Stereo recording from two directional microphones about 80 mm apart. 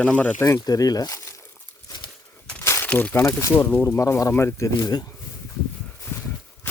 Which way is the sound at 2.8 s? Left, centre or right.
Centre.